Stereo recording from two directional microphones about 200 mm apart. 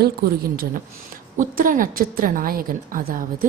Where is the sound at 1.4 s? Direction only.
45° right (ahead or behind).